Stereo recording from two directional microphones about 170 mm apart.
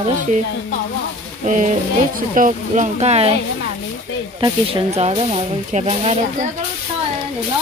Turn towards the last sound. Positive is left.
turn(degrees=-40)  # may be behind; listen again after turning